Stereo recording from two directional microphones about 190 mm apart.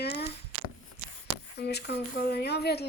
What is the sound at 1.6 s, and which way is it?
Speech, 60° left (ahead or behind).